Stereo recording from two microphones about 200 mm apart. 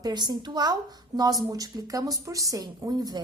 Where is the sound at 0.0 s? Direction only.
20° right (ahead or behind).